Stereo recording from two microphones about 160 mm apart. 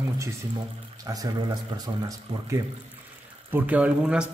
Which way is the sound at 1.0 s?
20° right (ahead or behind).